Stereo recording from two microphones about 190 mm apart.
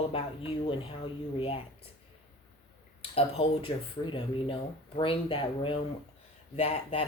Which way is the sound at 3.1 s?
30° left (ahead or behind).